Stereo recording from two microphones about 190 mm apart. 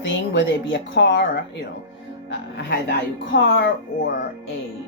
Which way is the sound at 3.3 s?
70° left (ahead or behind).